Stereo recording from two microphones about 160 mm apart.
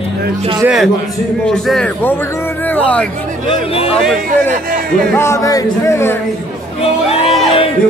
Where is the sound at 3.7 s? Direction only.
40° left (ahead or behind).